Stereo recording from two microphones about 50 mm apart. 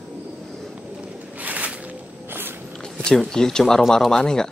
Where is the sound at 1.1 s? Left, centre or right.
Right.